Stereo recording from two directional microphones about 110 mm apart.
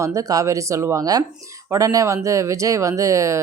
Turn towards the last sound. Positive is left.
turn(degrees=-30)  # may be behind; listen again after turning